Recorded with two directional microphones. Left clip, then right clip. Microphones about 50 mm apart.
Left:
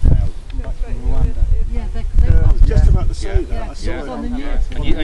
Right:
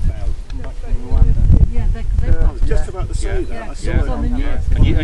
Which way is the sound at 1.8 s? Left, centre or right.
Centre.